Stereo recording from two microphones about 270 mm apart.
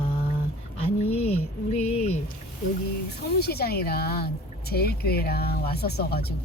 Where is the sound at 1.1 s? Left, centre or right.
Left.